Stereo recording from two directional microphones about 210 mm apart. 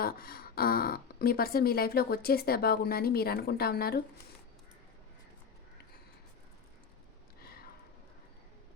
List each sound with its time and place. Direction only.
0.0 s speech: 45° left (ahead or behind)